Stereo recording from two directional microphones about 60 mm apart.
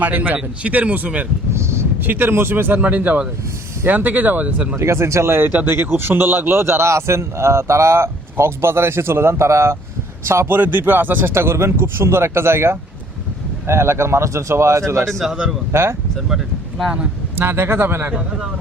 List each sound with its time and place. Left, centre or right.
0.0 s speech: right
1.5 s a sound: right
2.0 s speech: right
4.8 s a man's voice: right
5.5 s a man's voice: right
15.2 s a man's voice: centre
15.7 s a man's voice: right
16.3 s speech: centre
17.3 s speech: right
18.1 s a man's voice: centre